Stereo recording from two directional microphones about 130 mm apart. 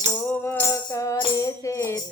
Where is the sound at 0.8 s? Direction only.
25° left (ahead or behind).